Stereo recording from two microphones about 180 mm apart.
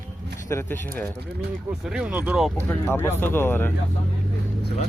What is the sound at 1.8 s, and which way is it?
Speech, 5° right (ahead or behind).